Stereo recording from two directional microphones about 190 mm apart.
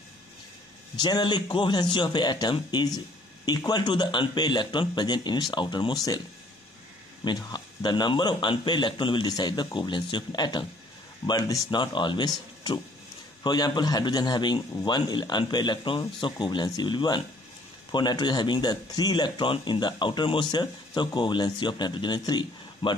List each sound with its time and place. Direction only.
0.9 s speech: 25° left (ahead or behind)
7.2 s speech: 20° left (ahead or behind)
13.4 s speech: 20° left (ahead or behind)